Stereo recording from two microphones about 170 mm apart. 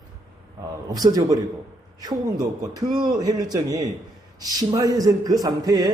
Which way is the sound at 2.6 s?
25° right (ahead or behind).